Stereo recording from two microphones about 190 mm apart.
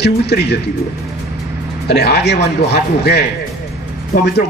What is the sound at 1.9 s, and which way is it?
A man's voice, 60° left (ahead or behind).